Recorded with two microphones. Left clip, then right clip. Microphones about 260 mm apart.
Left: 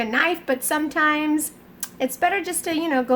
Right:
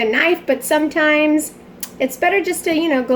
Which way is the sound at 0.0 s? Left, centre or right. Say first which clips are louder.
Right 6 dB; left.